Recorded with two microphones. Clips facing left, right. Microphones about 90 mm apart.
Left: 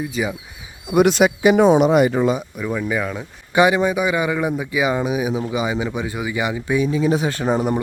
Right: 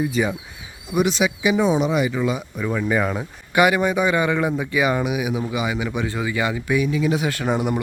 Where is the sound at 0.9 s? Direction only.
55° left (ahead or behind).